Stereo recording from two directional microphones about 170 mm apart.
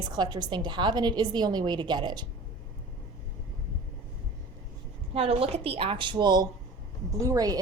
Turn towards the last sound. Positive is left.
turn(degrees=-20)  # may be behind; listen again after turning